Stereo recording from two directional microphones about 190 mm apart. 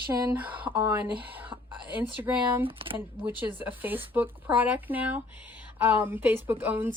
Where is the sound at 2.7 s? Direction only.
30° right (ahead or behind).